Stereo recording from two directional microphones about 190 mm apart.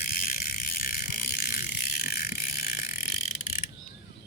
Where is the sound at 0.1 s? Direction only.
50° left (ahead or behind).